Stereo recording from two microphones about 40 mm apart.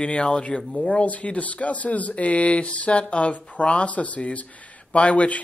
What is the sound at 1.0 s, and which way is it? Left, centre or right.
Speech, left.